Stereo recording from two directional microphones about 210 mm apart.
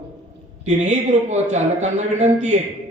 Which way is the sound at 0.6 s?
35° right (ahead or behind).